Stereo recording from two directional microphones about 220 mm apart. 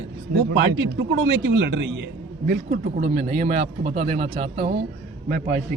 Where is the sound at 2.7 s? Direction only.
40° right (ahead or behind).